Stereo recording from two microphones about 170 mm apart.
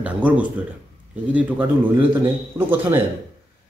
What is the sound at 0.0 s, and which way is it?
A man's voice, 10° right (ahead or behind).